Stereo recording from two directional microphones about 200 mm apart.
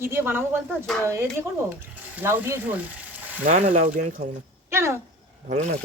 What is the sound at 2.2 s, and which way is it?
Speech, 15° right (ahead or behind).